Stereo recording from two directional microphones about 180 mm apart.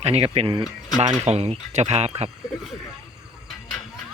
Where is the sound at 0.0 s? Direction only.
35° right (ahead or behind).